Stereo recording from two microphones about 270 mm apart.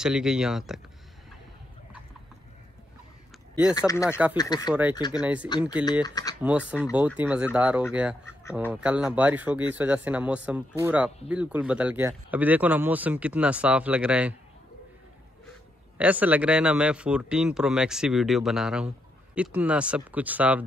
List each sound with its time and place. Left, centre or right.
0.0 s speech: centre
3.7 s speech: centre
5.2 s speech: centre
6.0 s speech: centre
6.8 s speech: centre
16.0 s speech: centre